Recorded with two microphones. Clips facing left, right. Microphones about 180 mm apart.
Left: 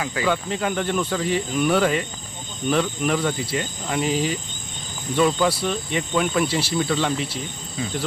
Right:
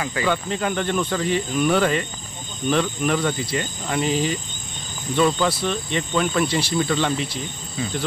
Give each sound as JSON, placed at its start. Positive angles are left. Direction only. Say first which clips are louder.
{"t": 0.0, "sound": "speech", "louder": "even", "side_deg": 5}